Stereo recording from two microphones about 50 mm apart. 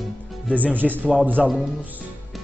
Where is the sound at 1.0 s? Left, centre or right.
Right.